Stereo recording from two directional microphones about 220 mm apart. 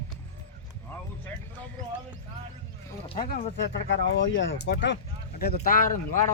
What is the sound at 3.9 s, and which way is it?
Speech, 55° left (ahead or behind).